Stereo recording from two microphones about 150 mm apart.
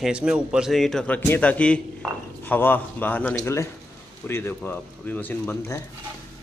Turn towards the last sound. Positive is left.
turn(degrees=15)  # may be behind; listen again after turning